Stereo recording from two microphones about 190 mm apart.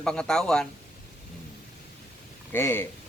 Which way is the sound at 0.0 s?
5° left (ahead or behind).